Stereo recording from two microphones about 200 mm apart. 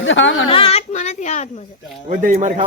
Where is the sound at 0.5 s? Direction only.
30° left (ahead or behind).